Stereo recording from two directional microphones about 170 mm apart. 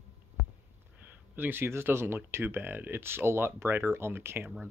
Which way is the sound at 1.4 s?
15° right (ahead or behind).